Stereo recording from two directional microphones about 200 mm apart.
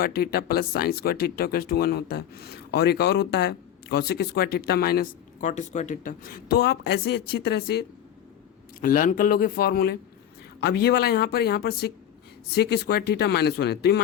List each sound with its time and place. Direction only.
0.0 s speech: 50° left (ahead or behind)
8.8 s speech: 45° left (ahead or behind)